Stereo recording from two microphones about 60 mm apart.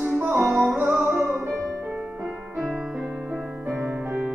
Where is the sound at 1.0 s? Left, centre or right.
Right.